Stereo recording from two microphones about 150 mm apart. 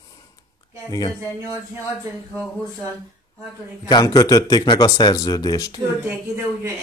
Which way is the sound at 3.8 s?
25° left (ahead or behind).